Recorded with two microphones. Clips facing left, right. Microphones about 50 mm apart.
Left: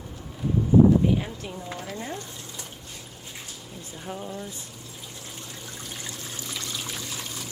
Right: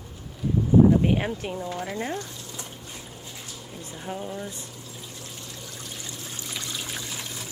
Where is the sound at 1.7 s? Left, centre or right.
Right.